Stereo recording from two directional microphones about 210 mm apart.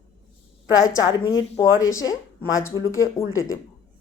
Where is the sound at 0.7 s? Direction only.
15° left (ahead or behind).